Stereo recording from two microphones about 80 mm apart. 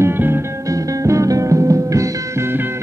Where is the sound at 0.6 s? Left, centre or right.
Right.